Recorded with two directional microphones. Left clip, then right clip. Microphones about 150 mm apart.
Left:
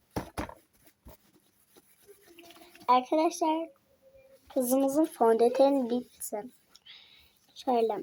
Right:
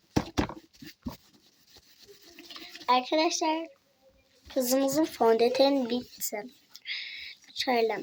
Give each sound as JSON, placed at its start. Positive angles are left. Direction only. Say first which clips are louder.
{"t": 0.1, "sound": "a sound", "louder": "right 7 dB", "side_deg": -20}
{"t": 2.9, "sound": "speech", "louder": "even", "side_deg": 5}
{"t": 5.1, "sound": "speech", "louder": "right 1 dB", "side_deg": -25}
{"t": 7.5, "sound": "cricket", "louder": "right 1 dB", "side_deg": 0}